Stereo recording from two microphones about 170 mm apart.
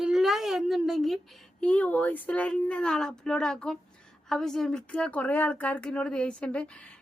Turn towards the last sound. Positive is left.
turn(degrees=5)  # may be behind; listen again after turning